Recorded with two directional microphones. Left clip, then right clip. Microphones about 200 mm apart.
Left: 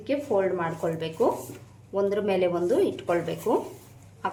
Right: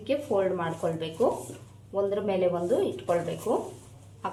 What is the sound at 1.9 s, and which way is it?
Speech, 25° left (ahead or behind).